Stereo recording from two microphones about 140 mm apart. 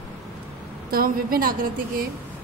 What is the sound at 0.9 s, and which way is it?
A woman's voice, 90° right.